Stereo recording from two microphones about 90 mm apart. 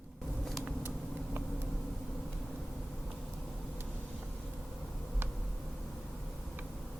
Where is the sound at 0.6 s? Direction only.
25° right (ahead or behind).